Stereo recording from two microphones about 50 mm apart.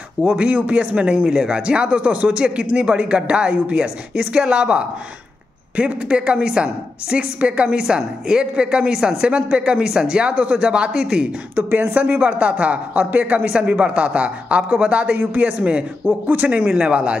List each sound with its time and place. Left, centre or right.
0.4 s a woman's voice: right
11.5 s a man's voice: right
11.9 s a woman's voice: right